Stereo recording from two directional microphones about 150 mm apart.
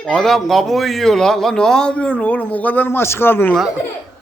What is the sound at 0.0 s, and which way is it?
A man's voice, 5° left (ahead or behind).